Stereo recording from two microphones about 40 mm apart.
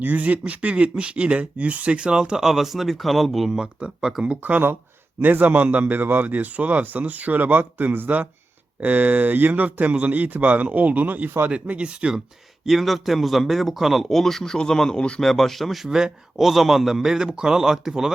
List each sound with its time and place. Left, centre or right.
0.0 s speech: right
2.4 s a man's voice: centre
3.5 s a man's voice: centre
5.2 s a man's voice: right
12.6 s a man's voice: centre
15.9 s a man's voice: centre
16.4 s a man's voice: centre